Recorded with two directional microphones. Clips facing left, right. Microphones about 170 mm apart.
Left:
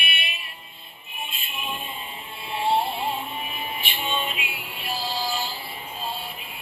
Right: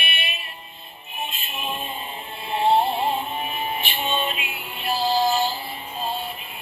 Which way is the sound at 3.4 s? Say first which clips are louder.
Right 5 dB; 45° right (ahead or behind).